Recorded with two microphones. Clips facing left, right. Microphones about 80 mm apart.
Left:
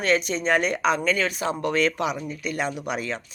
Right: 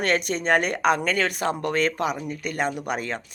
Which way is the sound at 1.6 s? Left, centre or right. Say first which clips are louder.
Left 2 dB; right.